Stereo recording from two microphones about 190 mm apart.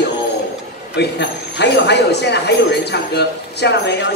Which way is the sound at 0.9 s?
65° left (ahead or behind).